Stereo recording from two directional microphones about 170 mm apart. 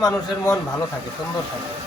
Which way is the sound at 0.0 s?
20° left (ahead or behind).